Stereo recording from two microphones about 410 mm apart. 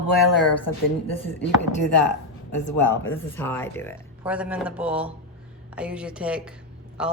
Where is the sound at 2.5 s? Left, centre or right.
Left.